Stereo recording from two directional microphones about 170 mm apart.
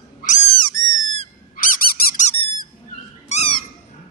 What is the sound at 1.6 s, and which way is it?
Squeak, 55° left (ahead or behind).